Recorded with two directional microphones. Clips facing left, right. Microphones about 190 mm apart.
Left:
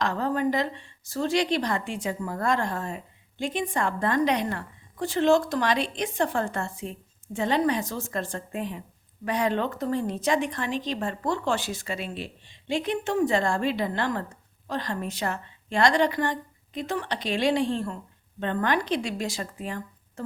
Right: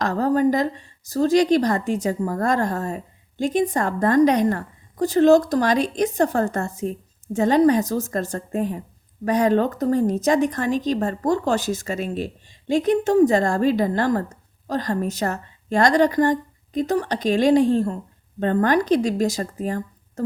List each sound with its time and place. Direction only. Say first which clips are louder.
0.0 s a woman's voice: right 7 dB; 40° right (ahead or behind)